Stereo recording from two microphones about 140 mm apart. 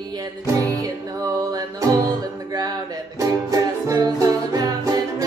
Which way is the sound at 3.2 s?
25° right (ahead or behind).